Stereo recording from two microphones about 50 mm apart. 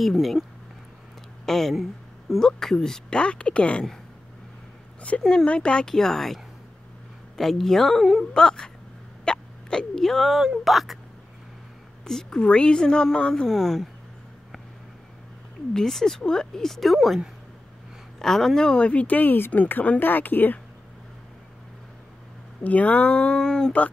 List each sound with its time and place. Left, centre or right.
0.0 s a woman's voice: centre; by 3.8 s left
5.3 s speech: centre
5.9 s a woman's voice: centre
8.3 s a woman's voice: centre
12.1 s speech: centre
13.5 s a woman's voice: centre
15.7 s speech: centre
18.2 s speech: centre; by 20.5 s left
22.6 s speech: left; by 23.7 s centre